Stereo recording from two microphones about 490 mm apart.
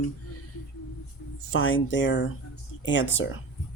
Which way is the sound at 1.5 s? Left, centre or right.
Left.